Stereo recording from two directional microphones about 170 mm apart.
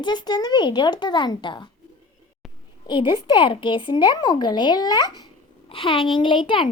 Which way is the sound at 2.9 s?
30° left (ahead or behind).